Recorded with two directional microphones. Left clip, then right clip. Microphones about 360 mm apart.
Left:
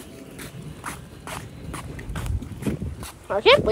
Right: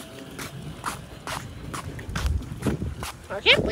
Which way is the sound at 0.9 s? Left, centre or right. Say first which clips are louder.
Right 3 dB; centre.